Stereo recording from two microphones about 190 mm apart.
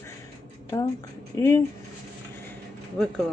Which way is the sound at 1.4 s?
15° left (ahead or behind).